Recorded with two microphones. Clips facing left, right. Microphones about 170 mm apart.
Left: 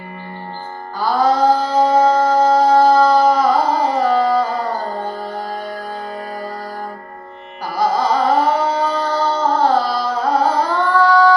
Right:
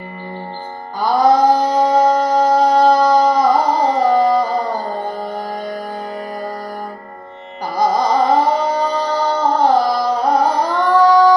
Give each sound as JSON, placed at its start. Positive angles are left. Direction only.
{"t": 0.9, "sound": "mantra", "side_deg": -15}
{"t": 4.1, "sound": "a sound", "side_deg": -15}
{"t": 7.8, "sound": "music", "side_deg": -15}